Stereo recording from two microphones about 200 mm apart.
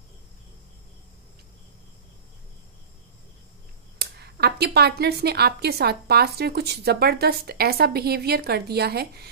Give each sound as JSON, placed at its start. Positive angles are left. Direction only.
{"t": 4.0, "sound": "speech", "side_deg": -55}